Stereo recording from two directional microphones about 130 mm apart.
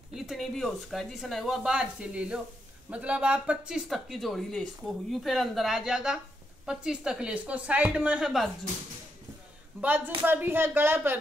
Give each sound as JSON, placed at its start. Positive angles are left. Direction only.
{"t": 0.1, "sound": "speech", "side_deg": 0}
{"t": 9.8, "sound": "speech", "side_deg": -15}